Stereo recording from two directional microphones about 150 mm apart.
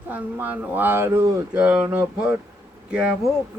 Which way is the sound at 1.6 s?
5° right (ahead or behind).